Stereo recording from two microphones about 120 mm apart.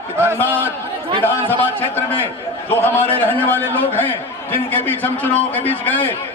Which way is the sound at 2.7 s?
15° left (ahead or behind).